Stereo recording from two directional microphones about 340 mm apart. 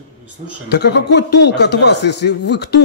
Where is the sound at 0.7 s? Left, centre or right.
Left.